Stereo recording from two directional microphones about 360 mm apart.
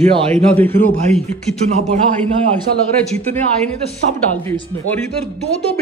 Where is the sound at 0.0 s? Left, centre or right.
Centre.